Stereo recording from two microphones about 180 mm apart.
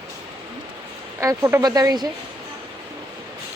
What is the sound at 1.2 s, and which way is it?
Speech, 15° right (ahead or behind).